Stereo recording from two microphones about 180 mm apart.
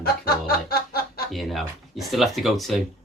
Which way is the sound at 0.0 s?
55° left (ahead or behind).